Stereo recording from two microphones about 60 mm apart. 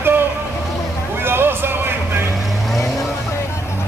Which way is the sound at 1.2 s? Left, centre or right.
Right.